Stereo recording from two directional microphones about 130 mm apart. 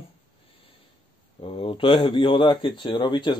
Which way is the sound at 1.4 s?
45° left (ahead or behind).